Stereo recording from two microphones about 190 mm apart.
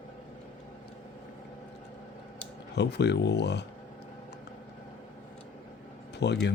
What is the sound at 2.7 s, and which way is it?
Speech, 60° left (ahead or behind).